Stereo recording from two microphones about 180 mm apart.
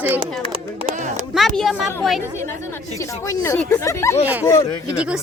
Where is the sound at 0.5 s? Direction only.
35° right (ahead or behind).